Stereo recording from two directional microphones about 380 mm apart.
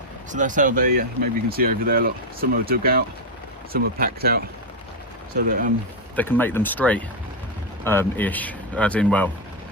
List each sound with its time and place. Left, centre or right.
0.3 s speech: centre
5.5 s speech: right
6.1 s speech: centre